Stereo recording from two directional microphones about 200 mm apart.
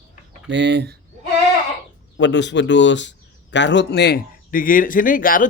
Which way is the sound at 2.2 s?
60° left (ahead or behind).